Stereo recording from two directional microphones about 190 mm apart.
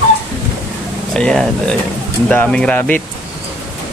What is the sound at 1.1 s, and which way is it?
Speech, 5° left (ahead or behind).